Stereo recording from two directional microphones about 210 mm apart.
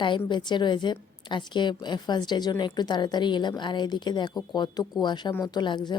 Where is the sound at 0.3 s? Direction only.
20° left (ahead or behind).